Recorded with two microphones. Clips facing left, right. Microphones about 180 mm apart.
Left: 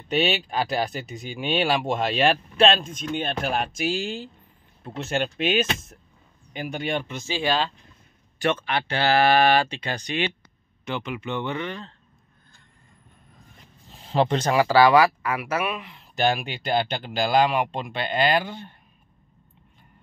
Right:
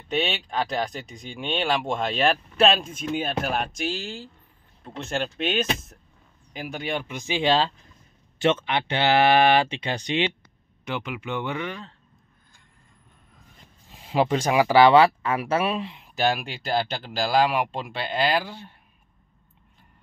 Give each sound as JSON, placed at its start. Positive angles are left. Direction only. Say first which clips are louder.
{"t": 0.1, "sound": "speech", "louder": "left 3 dB", "side_deg": 5}
{"t": 4.8, "sound": "speech", "louder": "left 2 dB", "side_deg": 5}
{"t": 10.9, "sound": "speech", "louder": "left 1 dB", "side_deg": -10}
{"t": 13.9, "sound": "speech", "louder": "even", "side_deg": -10}
{"t": 16.2, "sound": "speech", "louder": "left 1 dB", "side_deg": 0}